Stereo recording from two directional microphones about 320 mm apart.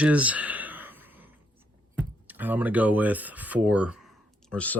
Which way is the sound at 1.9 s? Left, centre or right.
Centre.